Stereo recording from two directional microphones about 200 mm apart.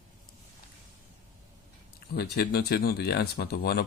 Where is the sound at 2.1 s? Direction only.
55° left (ahead or behind).